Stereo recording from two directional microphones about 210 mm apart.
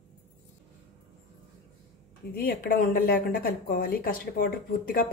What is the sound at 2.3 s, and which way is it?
Speech, 45° left (ahead or behind).